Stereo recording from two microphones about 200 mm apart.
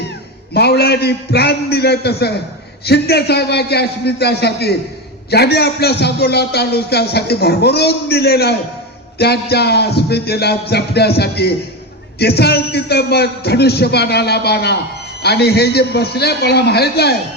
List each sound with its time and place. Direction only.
0.5 s a man's voice: 55° left (ahead or behind)